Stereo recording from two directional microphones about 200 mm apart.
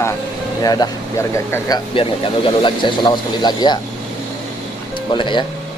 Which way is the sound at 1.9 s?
25° left (ahead or behind).